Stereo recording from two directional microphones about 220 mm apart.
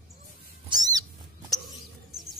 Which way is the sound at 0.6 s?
15° right (ahead or behind).